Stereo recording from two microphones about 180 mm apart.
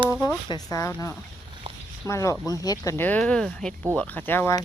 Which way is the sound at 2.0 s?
15° left (ahead or behind).